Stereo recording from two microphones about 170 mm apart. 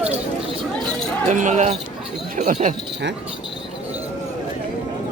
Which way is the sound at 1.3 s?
45° right (ahead or behind).